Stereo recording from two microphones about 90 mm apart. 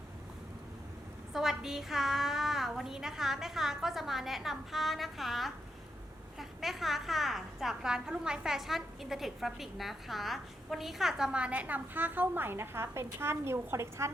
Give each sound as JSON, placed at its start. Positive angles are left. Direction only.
{"t": 1.3, "sound": "a woman's voice", "side_deg": -5}